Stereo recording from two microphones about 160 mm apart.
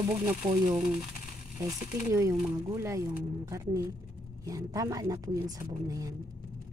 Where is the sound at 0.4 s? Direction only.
25° right (ahead or behind).